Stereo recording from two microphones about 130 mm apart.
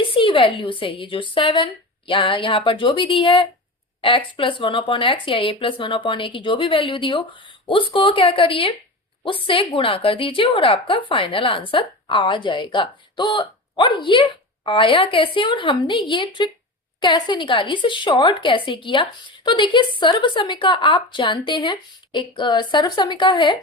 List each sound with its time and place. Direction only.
0.0 s a woman's voice: 40° left (ahead or behind)